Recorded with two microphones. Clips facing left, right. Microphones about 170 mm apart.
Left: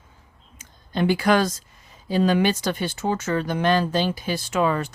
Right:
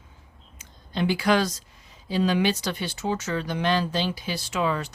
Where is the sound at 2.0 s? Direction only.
50° left (ahead or behind).